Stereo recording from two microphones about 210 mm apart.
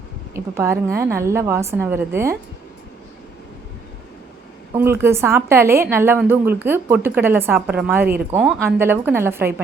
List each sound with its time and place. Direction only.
0.3 s speech: 15° right (ahead or behind)
4.7 s speech: 10° right (ahead or behind)